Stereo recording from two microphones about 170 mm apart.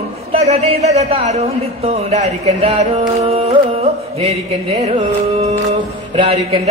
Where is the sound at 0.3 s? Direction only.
40° right (ahead or behind).